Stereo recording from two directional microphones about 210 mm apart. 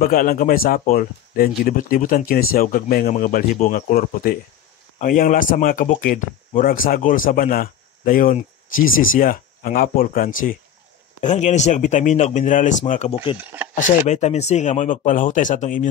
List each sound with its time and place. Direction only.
0.0 s speech: 40° left (ahead or behind)